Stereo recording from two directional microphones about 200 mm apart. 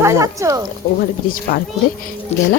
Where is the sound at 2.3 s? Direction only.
35° left (ahead or behind).